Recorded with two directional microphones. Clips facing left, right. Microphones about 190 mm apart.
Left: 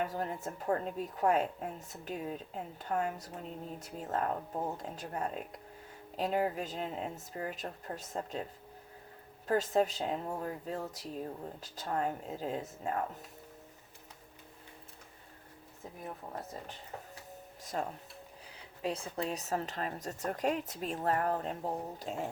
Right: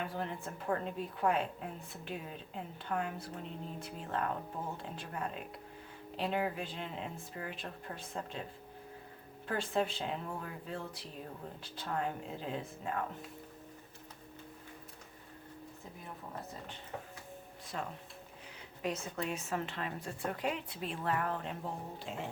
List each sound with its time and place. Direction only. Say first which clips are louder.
0.0 s a woman's voice: left 3 dB; 40° left (ahead or behind)
9.5 s a woman's voice: left 5 dB; 40° left (ahead or behind)
17.7 s a woman's voice: left 4 dB; 40° left (ahead or behind)